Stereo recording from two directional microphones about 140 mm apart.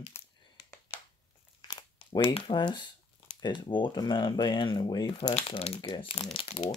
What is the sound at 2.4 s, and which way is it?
Speech, 35° left (ahead or behind).